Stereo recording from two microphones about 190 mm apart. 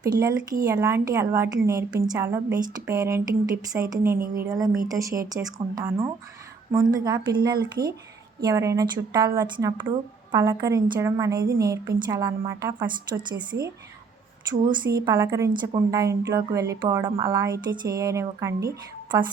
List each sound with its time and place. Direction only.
0.0 s a woman's voice: 15° right (ahead or behind)
14.7 s a woman's voice: 20° right (ahead or behind)